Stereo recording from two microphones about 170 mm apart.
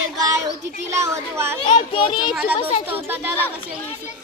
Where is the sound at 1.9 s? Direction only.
30° left (ahead or behind).